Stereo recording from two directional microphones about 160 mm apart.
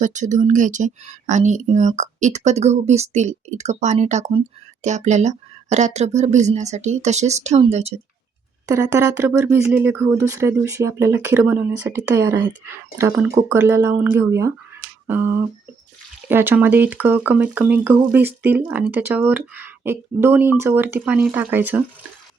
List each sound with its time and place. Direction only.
0.0 s speech: 50° right (ahead or behind)
8.6 s speech: 20° right (ahead or behind)
15.0 s a sound: 15° right (ahead or behind)
16.3 s speech: 15° right (ahead or behind)